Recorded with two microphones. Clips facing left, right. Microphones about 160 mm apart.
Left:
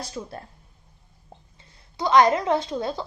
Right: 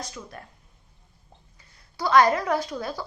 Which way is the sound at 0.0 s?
30° left (ahead or behind).